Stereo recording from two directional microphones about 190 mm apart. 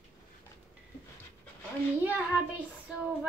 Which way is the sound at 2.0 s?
10° right (ahead or behind).